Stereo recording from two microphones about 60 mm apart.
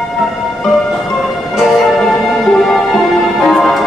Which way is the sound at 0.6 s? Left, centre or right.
Centre.